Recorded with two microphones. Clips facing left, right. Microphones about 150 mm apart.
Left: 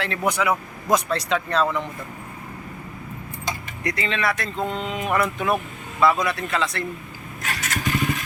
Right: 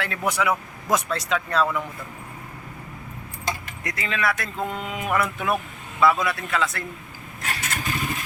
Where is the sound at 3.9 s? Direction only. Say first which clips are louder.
Left 2 dB; 5° right (ahead or behind).